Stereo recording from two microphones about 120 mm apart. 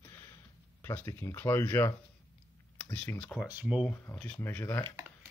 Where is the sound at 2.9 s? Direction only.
15° left (ahead or behind).